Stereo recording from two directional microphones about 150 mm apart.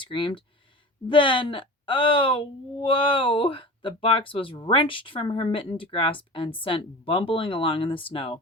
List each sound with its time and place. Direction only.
0.0 s speech: 35° left (ahead or behind)